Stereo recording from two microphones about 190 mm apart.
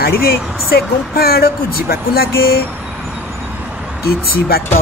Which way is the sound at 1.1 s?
55° left (ahead or behind).